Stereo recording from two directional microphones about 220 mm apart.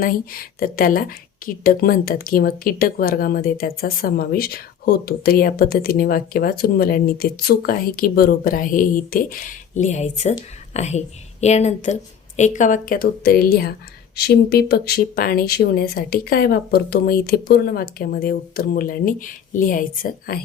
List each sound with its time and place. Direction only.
0.0 s speech: 40° left (ahead or behind)